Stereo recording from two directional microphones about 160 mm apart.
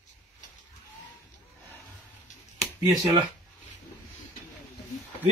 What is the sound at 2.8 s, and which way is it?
Speech, 20° right (ahead or behind).